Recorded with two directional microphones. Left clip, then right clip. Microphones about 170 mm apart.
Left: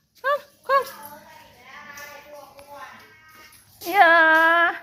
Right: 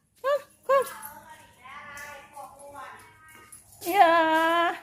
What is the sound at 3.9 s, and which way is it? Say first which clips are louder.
Female singing: left 5 dB; 15° right (ahead or behind).